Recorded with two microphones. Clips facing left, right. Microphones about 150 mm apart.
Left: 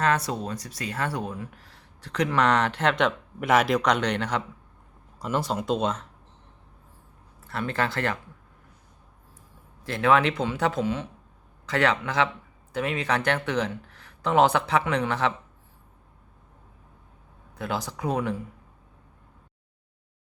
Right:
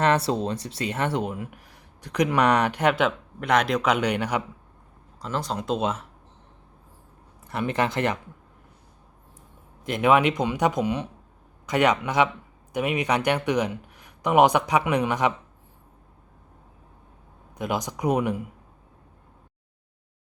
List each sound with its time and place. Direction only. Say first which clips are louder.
0.0 s speech: right 3 dB; 25° right (ahead or behind); by 3.1 s 10° right (ahead or behind)
3.4 s a man's voice: left 1 dB; 5° left (ahead or behind); by 4.4 s 10° right (ahead or behind)
5.2 s a man's voice: left 2 dB; 10° left (ahead or behind)
7.4 s speech: right 3 dB; 15° right (ahead or behind)
9.8 s speech: right 2 dB; 15° right (ahead or behind)
17.6 s speech: right 3 dB; 15° right (ahead or behind)